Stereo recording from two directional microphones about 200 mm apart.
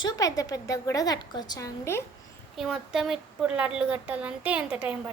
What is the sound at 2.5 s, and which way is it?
A woman's voice, centre (ahead or behind).